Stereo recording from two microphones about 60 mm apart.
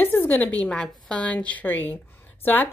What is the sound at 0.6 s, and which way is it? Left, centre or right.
A woman's voice, centre.